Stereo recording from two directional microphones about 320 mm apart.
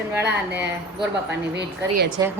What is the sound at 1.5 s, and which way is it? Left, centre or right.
Speech, right.